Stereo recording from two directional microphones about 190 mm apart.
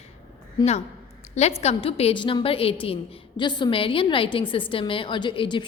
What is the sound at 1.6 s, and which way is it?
A woman's voice, 30° left (ahead or behind).